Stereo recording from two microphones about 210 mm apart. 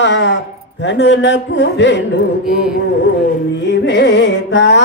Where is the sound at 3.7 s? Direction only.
55° left (ahead or behind).